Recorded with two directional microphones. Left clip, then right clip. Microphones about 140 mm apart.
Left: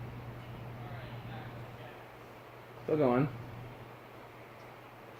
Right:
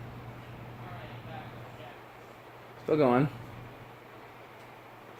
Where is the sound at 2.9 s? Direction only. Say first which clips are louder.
Right 4 dB; 55° right (ahead or behind).